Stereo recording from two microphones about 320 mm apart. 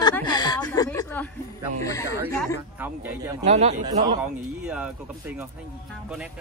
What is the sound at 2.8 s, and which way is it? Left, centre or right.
Speech, centre.